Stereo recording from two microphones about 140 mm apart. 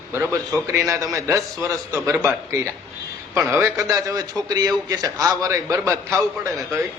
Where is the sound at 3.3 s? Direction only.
20° right (ahead or behind).